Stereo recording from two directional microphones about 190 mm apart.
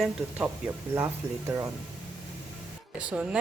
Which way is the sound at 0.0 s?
5° right (ahead or behind).